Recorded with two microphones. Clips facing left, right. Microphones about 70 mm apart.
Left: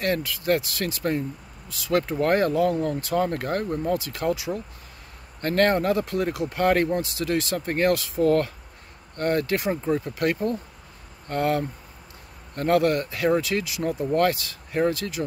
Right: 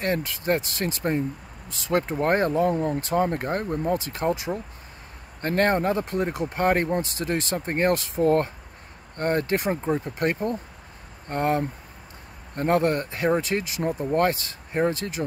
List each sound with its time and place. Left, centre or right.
0.0 s speech: right